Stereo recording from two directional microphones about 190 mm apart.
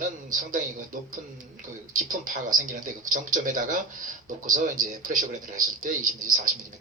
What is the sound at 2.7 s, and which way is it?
A man's voice, 40° right (ahead or behind).